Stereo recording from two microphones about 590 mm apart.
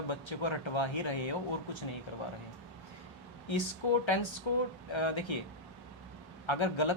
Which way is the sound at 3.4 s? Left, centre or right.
Left.